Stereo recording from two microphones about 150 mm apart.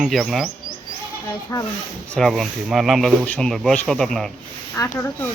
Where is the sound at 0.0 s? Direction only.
Centre (ahead or behind).